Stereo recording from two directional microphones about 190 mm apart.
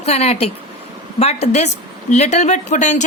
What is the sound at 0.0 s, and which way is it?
A woman's voice, 35° left (ahead or behind).